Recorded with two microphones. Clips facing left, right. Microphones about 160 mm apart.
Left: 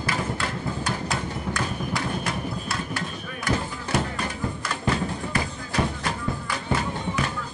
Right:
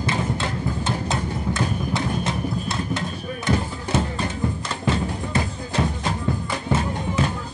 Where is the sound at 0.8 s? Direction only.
25° right (ahead or behind).